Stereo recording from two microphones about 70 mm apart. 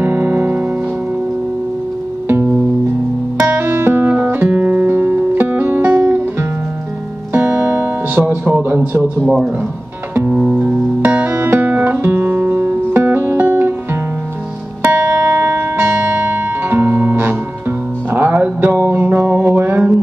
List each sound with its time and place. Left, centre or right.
0.0 s music: right
3.3 s music: centre
3.6 s music: right
7.3 s music: right
10.5 s music: right
11.2 s guitar: right
14.9 s music: right